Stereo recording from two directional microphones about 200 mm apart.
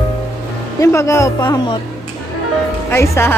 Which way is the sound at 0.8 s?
15° left (ahead or behind).